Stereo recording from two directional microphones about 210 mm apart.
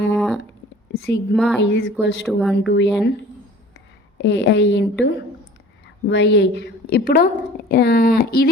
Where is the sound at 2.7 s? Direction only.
55° left (ahead or behind).